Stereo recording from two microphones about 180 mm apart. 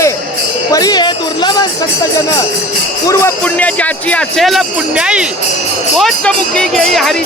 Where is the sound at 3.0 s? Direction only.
10° left (ahead or behind).